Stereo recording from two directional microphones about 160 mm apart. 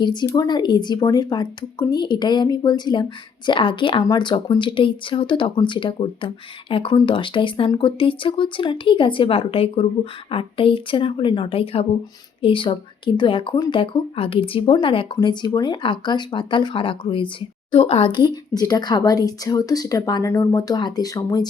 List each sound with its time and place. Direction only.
0.0 s speech: 25° left (ahead or behind)